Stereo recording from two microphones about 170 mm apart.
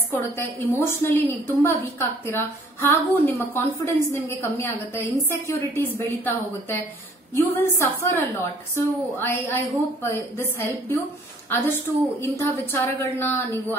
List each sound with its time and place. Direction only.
0.1 s a woman's voice: 10° left (ahead or behind)
7.3 s a woman's voice: 15° left (ahead or behind)
12.2 s a woman's voice: 15° left (ahead or behind)